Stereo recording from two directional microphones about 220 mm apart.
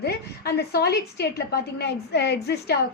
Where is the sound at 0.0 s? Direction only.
45° left (ahead or behind).